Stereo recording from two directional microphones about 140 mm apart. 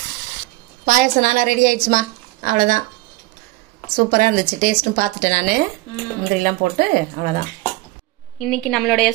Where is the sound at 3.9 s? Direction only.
80° right.